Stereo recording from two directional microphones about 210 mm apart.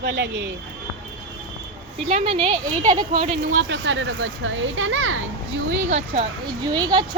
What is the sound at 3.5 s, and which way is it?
A child's voice, 60° right (ahead or behind).